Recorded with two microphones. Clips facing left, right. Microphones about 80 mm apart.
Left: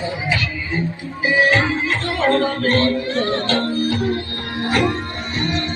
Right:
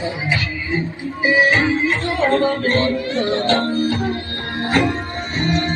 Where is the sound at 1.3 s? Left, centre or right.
Centre.